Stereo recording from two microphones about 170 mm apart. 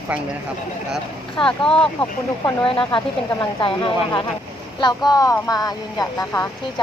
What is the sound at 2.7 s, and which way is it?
Speech, 30° left (ahead or behind).